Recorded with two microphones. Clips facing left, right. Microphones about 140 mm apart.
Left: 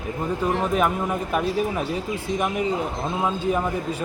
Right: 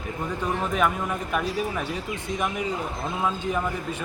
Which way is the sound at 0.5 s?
35° left (ahead or behind).